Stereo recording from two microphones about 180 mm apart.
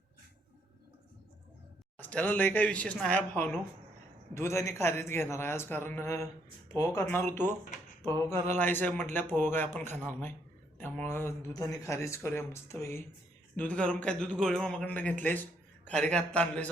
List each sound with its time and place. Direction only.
2.0 s a man's voice: 10° left (ahead or behind)